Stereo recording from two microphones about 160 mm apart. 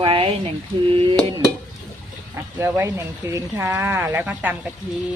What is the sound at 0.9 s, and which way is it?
Speech, 35° right (ahead or behind).